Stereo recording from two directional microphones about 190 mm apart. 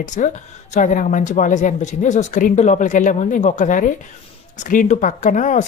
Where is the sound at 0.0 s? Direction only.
40° left (ahead or behind).